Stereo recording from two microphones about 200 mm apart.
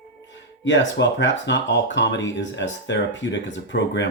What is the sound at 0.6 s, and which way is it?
Speech, 65° left (ahead or behind).